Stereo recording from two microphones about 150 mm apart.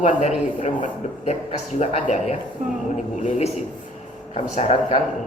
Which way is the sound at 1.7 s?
50° left (ahead or behind).